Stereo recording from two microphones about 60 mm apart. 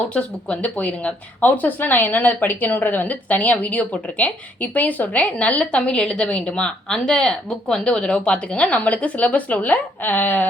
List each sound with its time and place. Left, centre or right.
0.1 s speech: centre